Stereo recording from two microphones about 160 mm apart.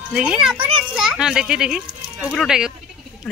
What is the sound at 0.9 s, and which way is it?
Speech, 5° right (ahead or behind).